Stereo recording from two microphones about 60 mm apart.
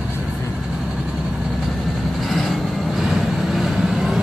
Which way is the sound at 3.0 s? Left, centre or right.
Centre.